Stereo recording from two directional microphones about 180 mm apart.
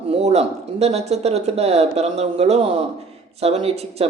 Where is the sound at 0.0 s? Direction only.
35° right (ahead or behind).